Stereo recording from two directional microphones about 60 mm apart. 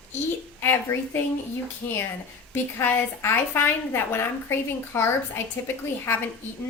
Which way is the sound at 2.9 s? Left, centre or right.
Left.